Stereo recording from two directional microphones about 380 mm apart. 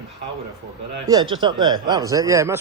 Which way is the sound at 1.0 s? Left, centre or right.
Centre.